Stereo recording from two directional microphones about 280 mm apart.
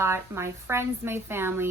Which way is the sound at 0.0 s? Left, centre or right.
Centre.